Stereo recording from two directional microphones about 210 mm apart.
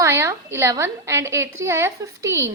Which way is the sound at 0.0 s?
15° right (ahead or behind).